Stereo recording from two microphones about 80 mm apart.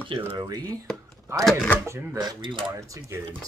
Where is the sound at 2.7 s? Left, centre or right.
Right.